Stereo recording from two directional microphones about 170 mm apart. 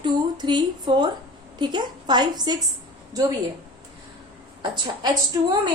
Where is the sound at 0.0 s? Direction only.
25° right (ahead or behind).